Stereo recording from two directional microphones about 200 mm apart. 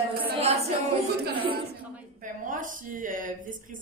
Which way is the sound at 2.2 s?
40° right (ahead or behind).